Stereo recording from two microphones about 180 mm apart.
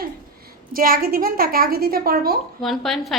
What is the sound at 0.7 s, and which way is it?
A woman's voice, 55° right (ahead or behind).